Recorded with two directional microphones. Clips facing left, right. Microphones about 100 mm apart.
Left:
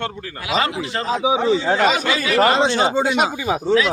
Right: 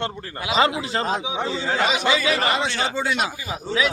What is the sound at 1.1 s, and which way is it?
Speech, 90° left.